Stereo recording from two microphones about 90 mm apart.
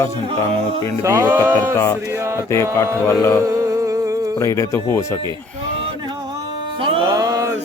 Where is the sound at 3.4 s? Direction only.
35° right (ahead or behind).